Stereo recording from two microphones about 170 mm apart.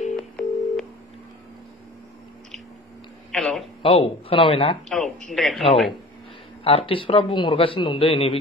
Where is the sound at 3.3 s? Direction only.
Centre (ahead or behind).